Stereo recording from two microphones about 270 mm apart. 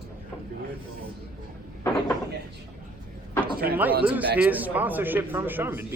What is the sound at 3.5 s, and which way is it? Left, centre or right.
Speech, right.